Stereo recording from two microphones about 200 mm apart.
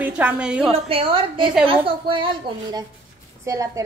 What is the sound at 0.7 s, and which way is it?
A woman's voice, 30° right (ahead or behind).